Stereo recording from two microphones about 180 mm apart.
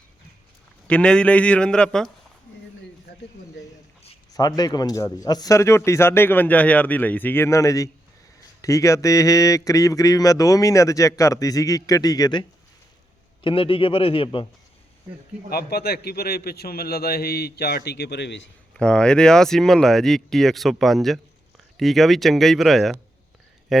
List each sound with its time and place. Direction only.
0.9 s speech: 5° left (ahead or behind)
4.3 s a man's voice: 20° left (ahead or behind)
15.4 s a man's voice: 60° left (ahead or behind)
18.7 s speech: 5° left (ahead or behind)